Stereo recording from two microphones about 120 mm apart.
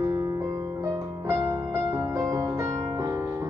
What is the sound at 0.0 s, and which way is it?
Music, 25° right (ahead or behind).